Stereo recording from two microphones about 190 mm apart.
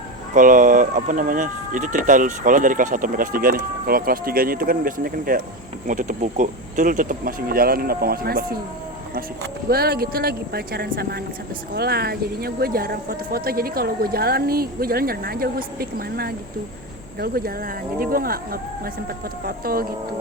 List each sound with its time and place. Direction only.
0.3 s speech: 45° right (ahead or behind)
9.6 s speech: 55° right (ahead or behind)